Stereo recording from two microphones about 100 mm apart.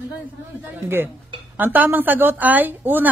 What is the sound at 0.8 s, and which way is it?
A woman's voice, 20° right (ahead or behind).